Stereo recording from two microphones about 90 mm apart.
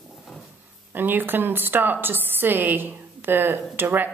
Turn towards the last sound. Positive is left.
turn(degrees=-20)  # may be behind; listen again after turning